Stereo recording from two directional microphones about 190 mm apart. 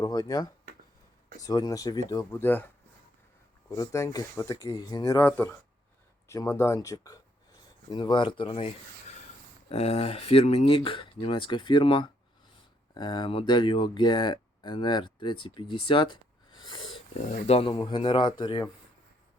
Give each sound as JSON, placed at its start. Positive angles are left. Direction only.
{"t": 0.0, "sound": "speech", "side_deg": 20}
{"t": 3.7, "sound": "speech", "side_deg": 15}